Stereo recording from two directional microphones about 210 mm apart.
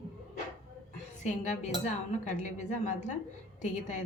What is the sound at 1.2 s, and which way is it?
Speech, 35° left (ahead or behind).